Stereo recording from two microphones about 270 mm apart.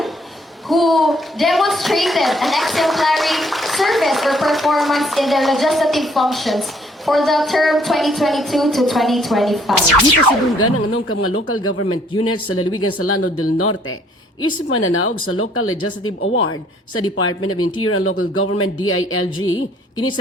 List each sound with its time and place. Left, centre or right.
0.7 s a woman's voice: centre
10.6 s speech: left